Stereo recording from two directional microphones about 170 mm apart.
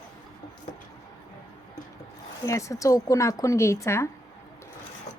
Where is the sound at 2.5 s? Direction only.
20° left (ahead or behind).